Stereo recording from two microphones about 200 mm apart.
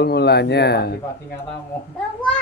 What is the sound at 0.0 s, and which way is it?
Speech, 55° left (ahead or behind).